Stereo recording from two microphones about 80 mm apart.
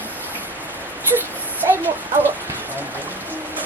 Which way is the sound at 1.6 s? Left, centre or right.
Right.